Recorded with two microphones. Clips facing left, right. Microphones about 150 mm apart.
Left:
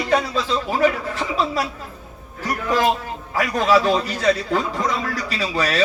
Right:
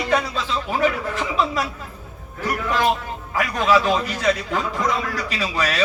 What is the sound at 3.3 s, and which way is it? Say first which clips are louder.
A man's voice: left 1 dB; 35° left (ahead or behind).